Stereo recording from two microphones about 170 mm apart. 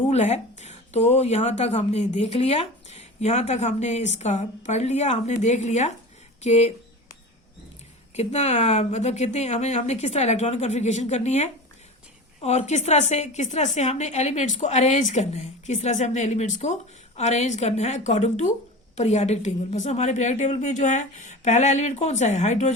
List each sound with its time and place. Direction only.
0.1 s a sound: 40° left (ahead or behind)
1.1 s speech: 40° left (ahead or behind)
8.1 s a woman's voice: 40° left (ahead or behind)